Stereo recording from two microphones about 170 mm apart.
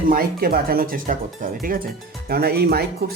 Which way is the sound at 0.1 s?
60° right (ahead or behind).